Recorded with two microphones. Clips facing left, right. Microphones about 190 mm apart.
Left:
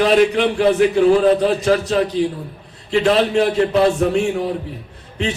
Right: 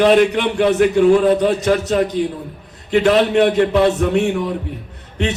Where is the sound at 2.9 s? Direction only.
30° left (ahead or behind).